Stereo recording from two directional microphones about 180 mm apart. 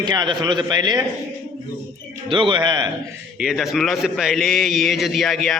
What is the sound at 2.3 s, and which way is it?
Speech, 25° right (ahead or behind).